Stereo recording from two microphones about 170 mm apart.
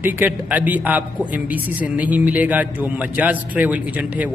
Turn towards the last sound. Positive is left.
turn(degrees=-10)  # may be behind; listen again after turning